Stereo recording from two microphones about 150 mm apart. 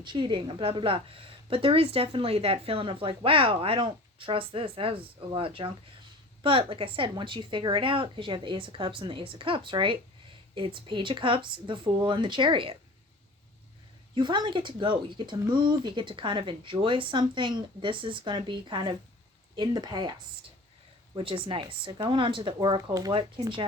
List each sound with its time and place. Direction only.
0.0 s a woman's voice: 30° right (ahead or behind)
14.2 s a woman's voice: 30° right (ahead or behind)
21.2 s a woman's voice: 35° right (ahead or behind)